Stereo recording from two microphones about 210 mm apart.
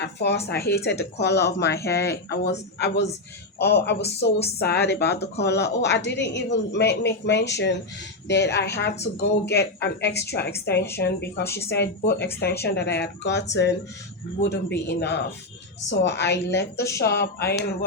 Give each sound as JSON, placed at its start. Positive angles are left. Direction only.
{"t": 0.0, "sound": "a woman's voice", "side_deg": 55}
{"t": 16.7, "sound": "speech", "side_deg": 15}
{"t": 17.0, "sound": "a woman's voice", "side_deg": 50}